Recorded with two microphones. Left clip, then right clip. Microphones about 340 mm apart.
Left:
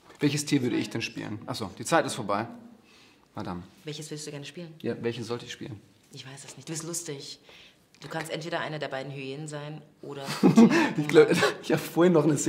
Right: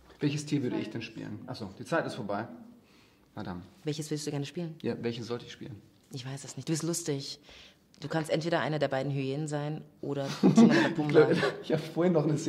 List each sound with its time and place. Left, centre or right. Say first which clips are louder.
0.2 s speech: left 5 dB; left
3.8 s speech: right 5 dB; right
4.8 s speech: left 4 dB; centre
6.1 s speech: right 1 dB; right
10.7 s speech: left 2 dB; centre; by 12.3 s left